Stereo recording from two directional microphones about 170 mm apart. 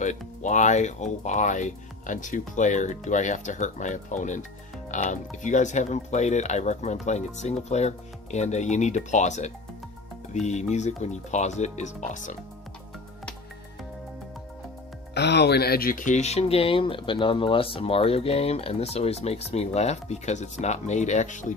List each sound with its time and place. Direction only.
0.0 s speech: 45° left (ahead or behind)
15.1 s speech: 80° left; by 21.5 s 45° left (ahead or behind)